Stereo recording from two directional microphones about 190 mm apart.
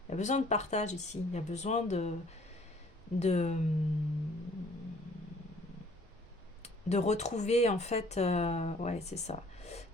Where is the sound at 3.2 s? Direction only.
35° left (ahead or behind).